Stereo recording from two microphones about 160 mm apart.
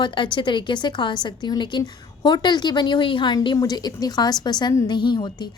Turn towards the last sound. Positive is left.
turn(degrees=30)  # may be behind; listen again after turning